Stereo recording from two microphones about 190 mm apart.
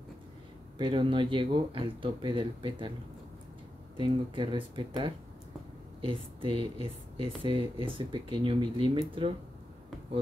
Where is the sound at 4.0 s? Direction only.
25° right (ahead or behind).